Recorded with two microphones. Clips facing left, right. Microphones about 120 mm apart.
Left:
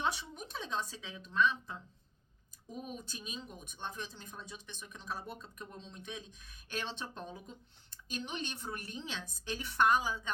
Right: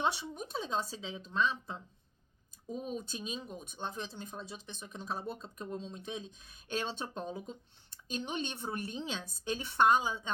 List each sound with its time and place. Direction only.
0.0 s speech: 30° right (ahead or behind)